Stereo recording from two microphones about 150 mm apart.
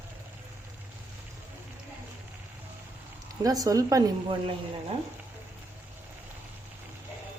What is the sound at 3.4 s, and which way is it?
Speech, 25° right (ahead or behind).